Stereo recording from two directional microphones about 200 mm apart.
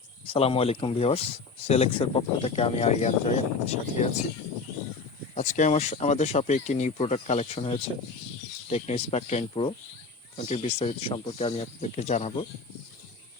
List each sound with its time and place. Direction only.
0.3 s speech: 30° left (ahead or behind)
5.3 s speech: 35° left (ahead or behind)